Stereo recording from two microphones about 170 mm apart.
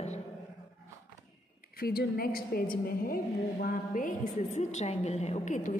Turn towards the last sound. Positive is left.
turn(degrees=45)  # may be behind; listen again after turning